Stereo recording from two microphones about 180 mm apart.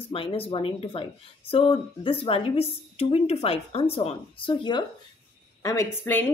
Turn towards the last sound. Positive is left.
turn(degrees=15)  # may be behind; listen again after turning